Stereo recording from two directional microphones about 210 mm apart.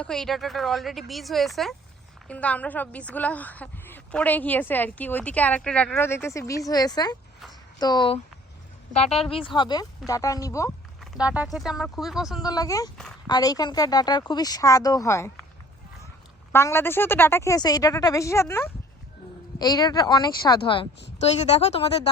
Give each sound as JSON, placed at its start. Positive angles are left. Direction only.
{"t": 0.0, "sound": "a woman's voice", "side_deg": 0}
{"t": 11.0, "sound": "speech", "side_deg": -5}
{"t": 12.5, "sound": "a woman's voice", "side_deg": 15}
{"t": 16.5, "sound": "a woman's voice", "side_deg": 10}